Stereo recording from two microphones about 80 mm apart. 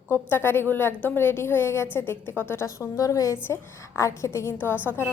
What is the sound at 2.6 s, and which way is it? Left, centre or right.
A woman's voice, left.